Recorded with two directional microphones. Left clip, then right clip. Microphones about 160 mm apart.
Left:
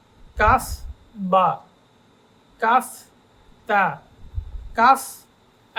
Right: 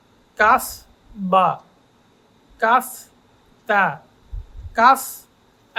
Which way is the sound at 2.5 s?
15° right (ahead or behind).